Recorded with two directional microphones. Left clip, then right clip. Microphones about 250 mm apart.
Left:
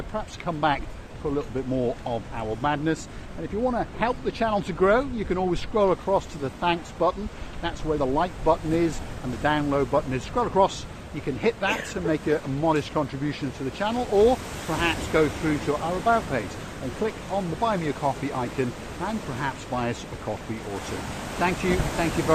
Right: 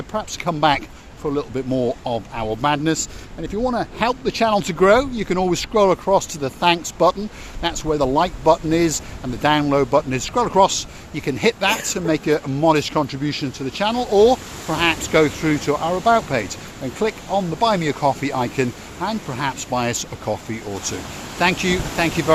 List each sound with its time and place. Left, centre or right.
0.1 s speech: right
21.4 s speech: right